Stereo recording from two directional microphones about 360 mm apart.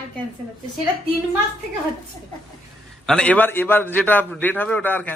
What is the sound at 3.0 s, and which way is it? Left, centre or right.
A man's voice, centre.